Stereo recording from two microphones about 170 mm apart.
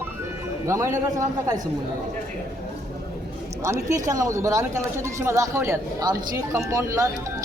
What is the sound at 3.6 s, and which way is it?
A man's voice, 15° right (ahead or behind).